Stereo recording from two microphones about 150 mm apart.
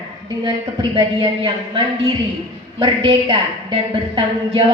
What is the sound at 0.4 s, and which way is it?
A woman's voice, 30° right (ahead or behind).